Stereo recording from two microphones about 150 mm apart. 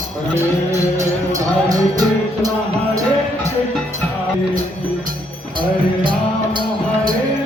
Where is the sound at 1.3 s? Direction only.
25° right (ahead or behind).